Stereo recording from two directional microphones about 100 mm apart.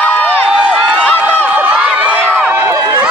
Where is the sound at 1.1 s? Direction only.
15° left (ahead or behind).